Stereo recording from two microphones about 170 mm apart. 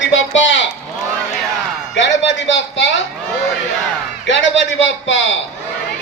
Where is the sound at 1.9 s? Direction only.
90° left.